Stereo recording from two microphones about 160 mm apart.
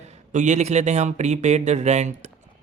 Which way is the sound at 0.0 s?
45° right (ahead or behind).